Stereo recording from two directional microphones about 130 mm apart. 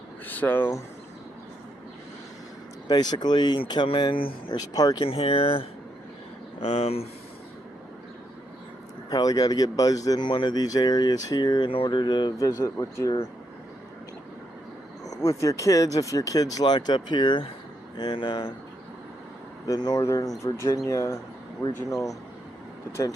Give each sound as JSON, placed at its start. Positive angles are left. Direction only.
{"t": 0.3, "sound": "speech", "side_deg": 15}
{"t": 2.8, "sound": "speech", "side_deg": 30}
{"t": 5.0, "sound": "speech", "side_deg": 45}
{"t": 9.0, "sound": "speech", "side_deg": 30}
{"t": 15.0, "sound": "speech", "side_deg": 25}
{"t": 19.6, "sound": "speech", "side_deg": 30}
{"t": 22.9, "sound": "speech", "side_deg": 20}